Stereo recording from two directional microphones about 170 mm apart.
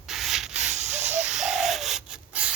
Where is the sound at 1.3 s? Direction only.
5° right (ahead or behind).